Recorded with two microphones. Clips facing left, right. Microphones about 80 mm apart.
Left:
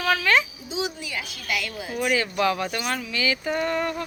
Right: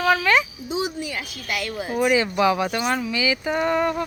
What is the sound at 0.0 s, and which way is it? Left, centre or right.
Speech, centre.